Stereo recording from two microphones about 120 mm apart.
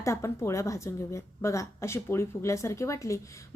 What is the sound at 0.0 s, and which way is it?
A woman's voice, 25° left (ahead or behind).